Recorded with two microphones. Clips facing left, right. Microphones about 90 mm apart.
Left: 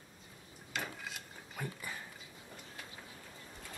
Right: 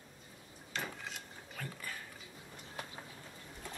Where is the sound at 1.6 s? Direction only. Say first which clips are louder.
Left 2 dB; 15° left (ahead or behind).